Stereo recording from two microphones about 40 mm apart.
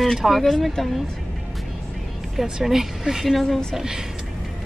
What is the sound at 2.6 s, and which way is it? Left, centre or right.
Speech, centre.